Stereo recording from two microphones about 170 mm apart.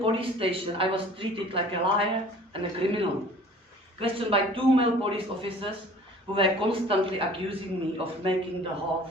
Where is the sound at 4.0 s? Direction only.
35° right (ahead or behind).